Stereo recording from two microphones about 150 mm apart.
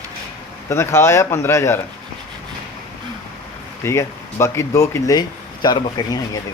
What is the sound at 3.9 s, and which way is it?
Speech, 20° left (ahead or behind).